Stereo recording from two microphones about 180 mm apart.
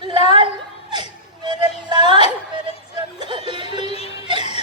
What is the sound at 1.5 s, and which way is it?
Speech, 25° right (ahead or behind).